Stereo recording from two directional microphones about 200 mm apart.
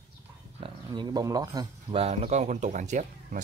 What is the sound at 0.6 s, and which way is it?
Speech, 20° right (ahead or behind).